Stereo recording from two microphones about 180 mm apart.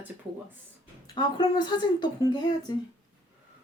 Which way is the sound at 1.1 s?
25° left (ahead or behind).